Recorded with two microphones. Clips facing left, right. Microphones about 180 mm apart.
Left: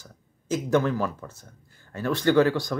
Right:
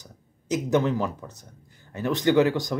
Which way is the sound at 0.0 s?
20° right (ahead or behind).